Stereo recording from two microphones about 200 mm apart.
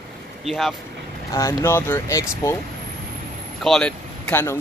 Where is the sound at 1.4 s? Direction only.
15° left (ahead or behind).